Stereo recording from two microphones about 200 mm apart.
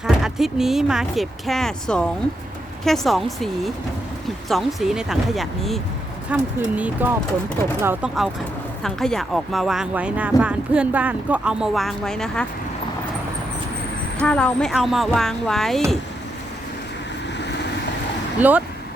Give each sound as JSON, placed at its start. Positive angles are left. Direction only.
{"t": 0.0, "sound": "speech", "side_deg": 0}
{"t": 14.2, "sound": "speech", "side_deg": 5}
{"t": 17.3, "sound": "vehicle", "side_deg": 60}
{"t": 18.3, "sound": "speech", "side_deg": -10}